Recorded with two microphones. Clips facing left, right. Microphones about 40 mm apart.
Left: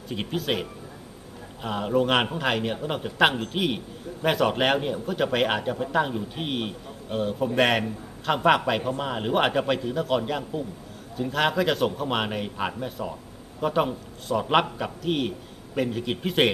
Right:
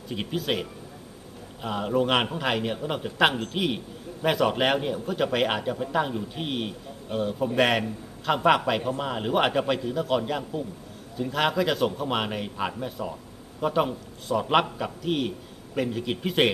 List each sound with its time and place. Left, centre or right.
0.1 s a man's voice: centre
3.3 s a man's voice: centre
4.2 s a man's voice: centre